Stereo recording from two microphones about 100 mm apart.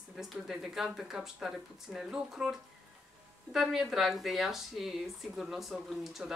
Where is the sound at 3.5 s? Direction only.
Centre (ahead or behind).